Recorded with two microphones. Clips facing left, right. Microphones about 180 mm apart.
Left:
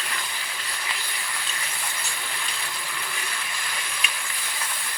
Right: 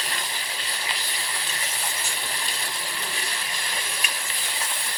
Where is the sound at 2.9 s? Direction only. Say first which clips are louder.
Right 1 dB; 35° right (ahead or behind).